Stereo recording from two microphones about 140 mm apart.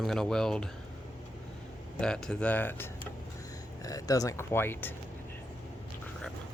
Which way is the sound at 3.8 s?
25° left (ahead or behind).